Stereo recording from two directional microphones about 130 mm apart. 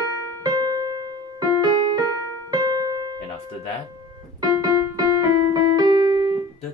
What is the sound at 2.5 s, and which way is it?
Keyboard, 30° right (ahead or behind).